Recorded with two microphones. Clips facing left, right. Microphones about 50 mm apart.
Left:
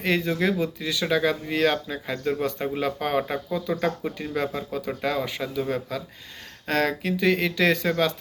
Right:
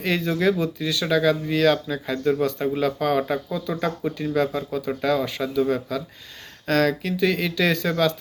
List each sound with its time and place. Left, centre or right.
0.3 s a man's voice: centre